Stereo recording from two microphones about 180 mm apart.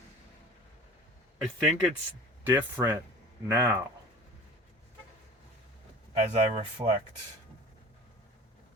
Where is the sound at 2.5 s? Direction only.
10° right (ahead or behind).